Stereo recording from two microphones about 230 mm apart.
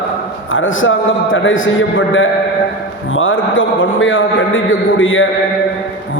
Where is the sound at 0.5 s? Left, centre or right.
Left.